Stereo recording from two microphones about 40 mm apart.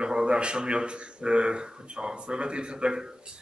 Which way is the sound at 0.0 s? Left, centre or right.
Right.